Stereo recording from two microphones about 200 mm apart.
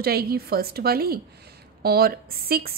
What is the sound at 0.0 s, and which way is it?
A woman's voice, 50° right (ahead or behind).